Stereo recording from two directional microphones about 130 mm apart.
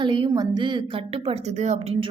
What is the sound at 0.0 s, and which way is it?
A woman's voice, 35° right (ahead or behind).